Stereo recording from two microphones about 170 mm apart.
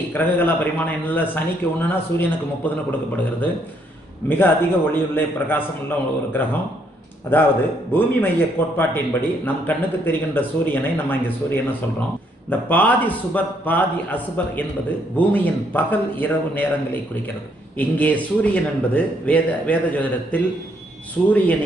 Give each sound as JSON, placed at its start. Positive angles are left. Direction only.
{"t": 0.1, "sound": "a man's voice", "side_deg": 10}
{"t": 4.2, "sound": "a man's voice", "side_deg": 10}